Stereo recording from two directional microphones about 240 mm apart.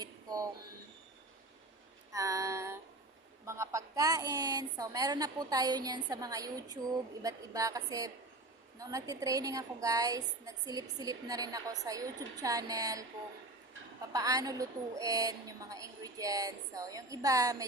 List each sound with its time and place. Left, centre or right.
0.0 s a sound: centre
2.1 s female singing: centre
3.4 s a woman's voice: centre
14.1 s a woman's voice: centre